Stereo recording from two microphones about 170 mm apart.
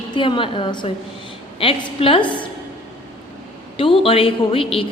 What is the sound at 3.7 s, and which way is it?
A woman's voice, 30° left (ahead or behind).